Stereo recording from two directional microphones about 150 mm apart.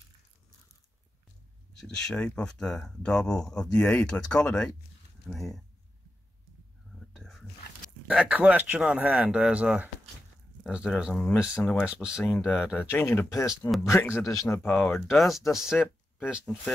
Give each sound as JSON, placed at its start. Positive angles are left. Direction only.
{"t": 1.8, "sound": "speech", "side_deg": 5}
{"t": 7.2, "sound": "whispering", "side_deg": 0}
{"t": 8.1, "sound": "speech", "side_deg": -5}
{"t": 11.4, "sound": "a man's voice", "side_deg": 15}
{"t": 11.8, "sound": "speech", "side_deg": -5}
{"t": 13.0, "sound": "a man's voice", "side_deg": 15}
{"t": 14.7, "sound": "a man's voice", "side_deg": 10}
{"t": 15.1, "sound": "speech", "side_deg": 0}